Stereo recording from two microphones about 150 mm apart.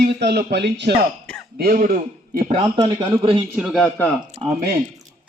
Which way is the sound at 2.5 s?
35° right (ahead or behind).